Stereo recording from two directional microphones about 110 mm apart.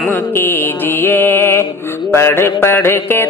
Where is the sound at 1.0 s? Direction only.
20° left (ahead or behind).